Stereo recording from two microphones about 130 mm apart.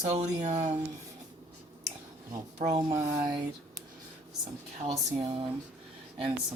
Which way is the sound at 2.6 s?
30° right (ahead or behind).